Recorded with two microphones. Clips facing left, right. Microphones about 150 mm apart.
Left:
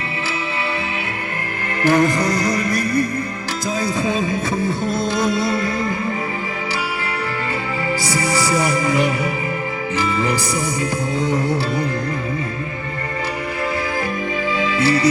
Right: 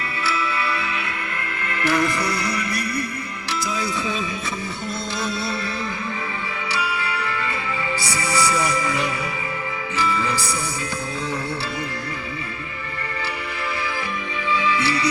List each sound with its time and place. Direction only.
1.9 s music: 40° left (ahead or behind)
14.8 s music: 45° left (ahead or behind)